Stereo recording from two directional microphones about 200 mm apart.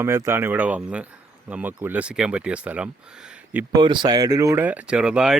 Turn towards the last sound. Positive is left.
turn(degrees=-5)  # may be behind; listen again after turning